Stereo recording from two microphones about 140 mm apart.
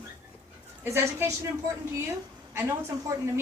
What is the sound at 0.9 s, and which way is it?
Speech, 20° right (ahead or behind).